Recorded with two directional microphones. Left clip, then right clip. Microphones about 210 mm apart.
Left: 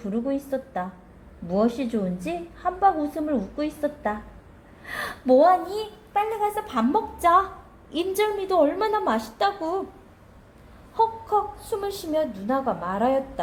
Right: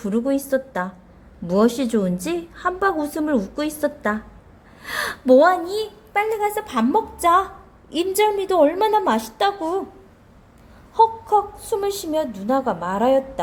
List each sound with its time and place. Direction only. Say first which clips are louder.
0.0 s a woman's voice: right 6 dB; 35° right (ahead or behind)
10.9 s speech: right 6 dB; 25° right (ahead or behind)